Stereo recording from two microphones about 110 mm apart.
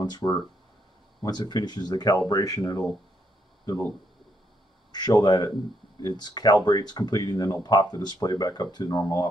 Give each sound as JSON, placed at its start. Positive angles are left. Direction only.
{"t": 0.0, "sound": "speech", "side_deg": 40}
{"t": 4.9, "sound": "speech", "side_deg": 40}